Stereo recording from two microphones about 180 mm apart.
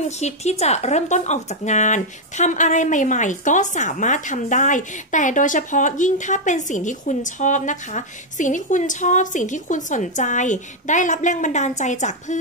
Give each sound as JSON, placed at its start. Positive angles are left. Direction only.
{"t": 0.0, "sound": "speech", "side_deg": 40}